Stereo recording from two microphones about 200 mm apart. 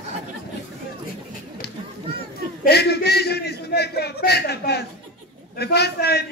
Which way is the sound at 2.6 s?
55° left (ahead or behind).